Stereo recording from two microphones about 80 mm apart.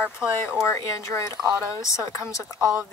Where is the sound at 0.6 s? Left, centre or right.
Left.